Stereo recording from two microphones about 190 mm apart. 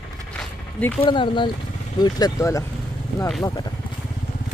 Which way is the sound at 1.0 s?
25° left (ahead or behind).